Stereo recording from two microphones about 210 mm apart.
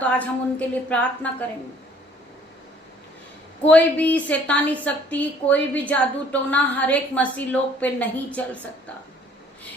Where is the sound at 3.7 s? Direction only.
5° left (ahead or behind).